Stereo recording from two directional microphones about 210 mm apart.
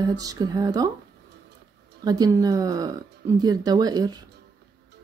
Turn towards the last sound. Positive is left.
turn(degrees=-20)  # may be behind; listen again after turning